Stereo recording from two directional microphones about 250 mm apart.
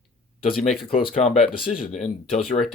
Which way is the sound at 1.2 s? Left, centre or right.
Left.